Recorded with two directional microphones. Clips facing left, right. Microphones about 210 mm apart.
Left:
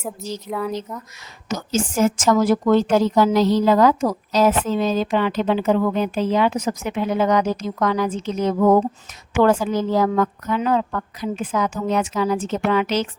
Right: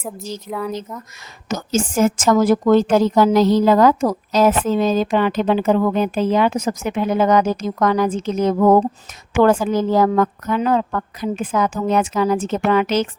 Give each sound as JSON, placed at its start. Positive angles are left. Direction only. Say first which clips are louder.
{"t": 0.5, "sound": "speech", "louder": "even", "side_deg": 0}
{"t": 1.5, "sound": "a woman's voice", "louder": "right 2 dB", "side_deg": -45}